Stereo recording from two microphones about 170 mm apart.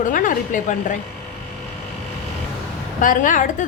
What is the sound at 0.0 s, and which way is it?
Speech, 50° left (ahead or behind).